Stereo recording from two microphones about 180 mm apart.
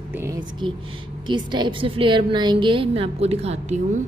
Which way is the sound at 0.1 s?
15° right (ahead or behind).